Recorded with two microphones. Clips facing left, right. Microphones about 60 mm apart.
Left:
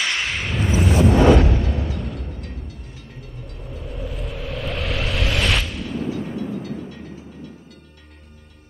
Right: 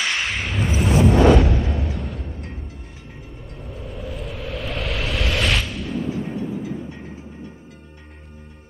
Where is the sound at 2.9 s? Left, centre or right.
Centre.